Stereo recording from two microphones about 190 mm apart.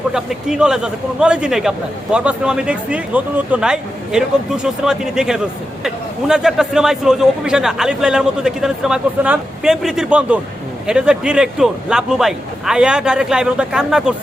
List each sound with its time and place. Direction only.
0.1 s a man's voice: 5° right (ahead or behind)